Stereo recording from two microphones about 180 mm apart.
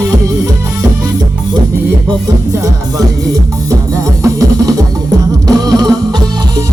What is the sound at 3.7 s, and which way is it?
Music, 20° right (ahead or behind).